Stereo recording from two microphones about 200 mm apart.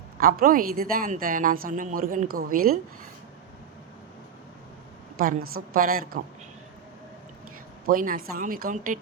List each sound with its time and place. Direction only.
0.2 s a woman's voice: 45° right (ahead or behind)
5.1 s a woman's voice: 45° right (ahead or behind)
7.9 s a woman's voice: 45° right (ahead or behind)